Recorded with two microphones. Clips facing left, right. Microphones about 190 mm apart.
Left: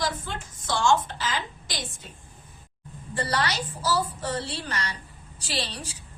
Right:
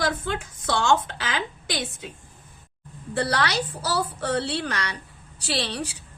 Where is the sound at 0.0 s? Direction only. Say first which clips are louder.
Right 4 dB; 60° right (ahead or behind).